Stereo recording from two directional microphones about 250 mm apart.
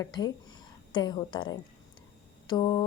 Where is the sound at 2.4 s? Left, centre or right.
Centre.